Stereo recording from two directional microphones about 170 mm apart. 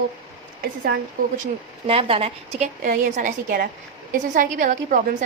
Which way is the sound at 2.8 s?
50° right (ahead or behind).